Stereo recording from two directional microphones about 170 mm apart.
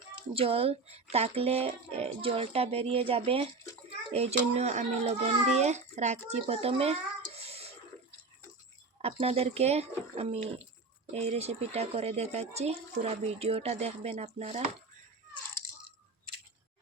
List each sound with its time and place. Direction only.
0.3 s speech: 35° right (ahead or behind)
7.3 s a sound: 35° right (ahead or behind)
9.1 s speech: 35° right (ahead or behind)